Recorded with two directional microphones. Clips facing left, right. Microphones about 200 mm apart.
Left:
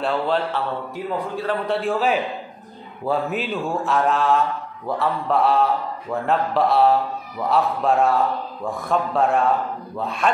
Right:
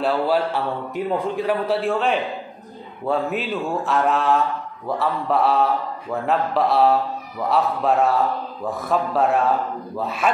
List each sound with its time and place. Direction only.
0.0 s a man's voice: 5° right (ahead or behind)
0.9 s a man's voice: 15° right (ahead or behind)
1.7 s a man's voice: centre (ahead or behind)